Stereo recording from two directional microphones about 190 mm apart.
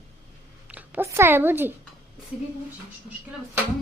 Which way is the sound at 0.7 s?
10° right (ahead or behind).